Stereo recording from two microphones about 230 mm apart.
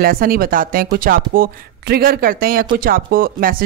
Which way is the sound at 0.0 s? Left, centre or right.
Right.